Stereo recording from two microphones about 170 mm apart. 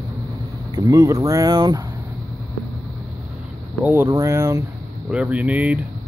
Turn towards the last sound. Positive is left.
turn(degrees=-10)  # may be behind; listen again after turning